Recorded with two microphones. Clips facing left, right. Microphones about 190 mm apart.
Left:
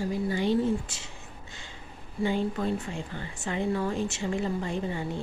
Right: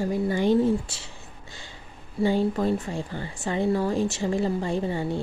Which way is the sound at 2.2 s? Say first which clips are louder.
Right 5 dB; 35° right (ahead or behind).